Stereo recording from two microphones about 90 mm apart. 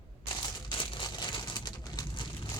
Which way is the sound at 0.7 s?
70° left (ahead or behind).